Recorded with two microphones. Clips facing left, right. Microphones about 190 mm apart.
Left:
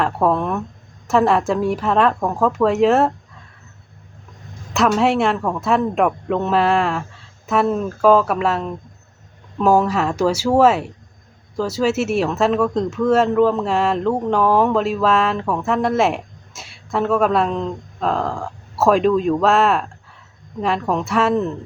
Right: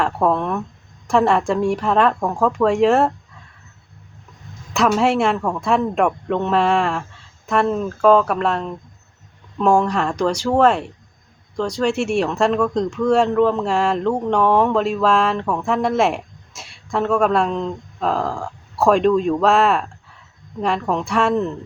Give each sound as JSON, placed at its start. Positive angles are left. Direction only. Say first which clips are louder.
{"t": 0.0, "sound": "speech", "louder": "left 1 dB", "side_deg": 0}
{"t": 4.7, "sound": "speech", "louder": "even", "side_deg": 0}